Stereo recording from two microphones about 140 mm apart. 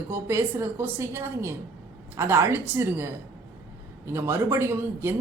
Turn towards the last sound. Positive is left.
turn(degrees=-20)  # may be behind; listen again after turning